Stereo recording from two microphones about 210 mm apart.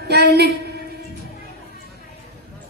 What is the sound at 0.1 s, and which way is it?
Speech, 50° right (ahead or behind).